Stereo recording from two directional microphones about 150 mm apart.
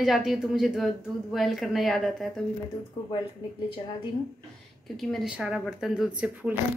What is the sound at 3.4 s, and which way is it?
Speech, 30° left (ahead or behind).